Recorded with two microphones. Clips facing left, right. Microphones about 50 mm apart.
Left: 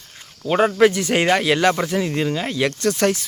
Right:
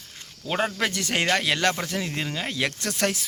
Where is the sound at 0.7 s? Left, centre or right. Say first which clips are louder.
Left 10 dB; centre.